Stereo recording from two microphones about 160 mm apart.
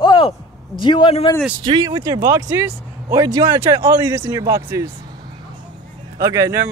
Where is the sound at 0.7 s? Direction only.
30° left (ahead or behind).